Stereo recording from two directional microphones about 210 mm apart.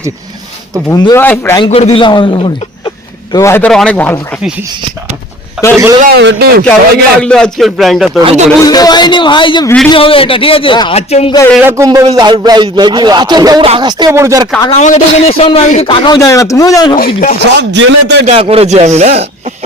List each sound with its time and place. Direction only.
0.9 s speech: 15° left (ahead or behind)
1.6 s a man's voice: 25° left (ahead or behind)
3.3 s speech: 10° left (ahead or behind)
5.6 s a man's voice: 5° right (ahead or behind)
6.0 s a man's voice: 50° right (ahead or behind)
7.2 s speech: 5° left (ahead or behind)
8.2 s speech: 30° right (ahead or behind)
8.6 s a man's voice: 20° left (ahead or behind)
11.5 s speech: 10° right (ahead or behind)
14.6 s a man's voice: 30° left (ahead or behind)
17.4 s a man's voice: 55° right (ahead or behind)
18.3 s speech: 25° right (ahead or behind)